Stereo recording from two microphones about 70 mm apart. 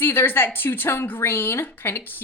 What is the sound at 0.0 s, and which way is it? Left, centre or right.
A woman's voice, left.